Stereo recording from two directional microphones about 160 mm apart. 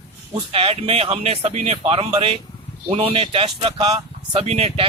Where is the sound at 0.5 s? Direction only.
35° right (ahead or behind).